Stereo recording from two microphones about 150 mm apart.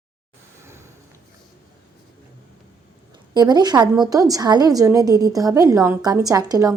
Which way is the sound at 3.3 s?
25° right (ahead or behind).